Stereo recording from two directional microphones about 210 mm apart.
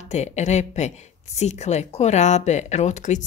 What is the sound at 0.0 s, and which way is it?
Speech, 35° left (ahead or behind).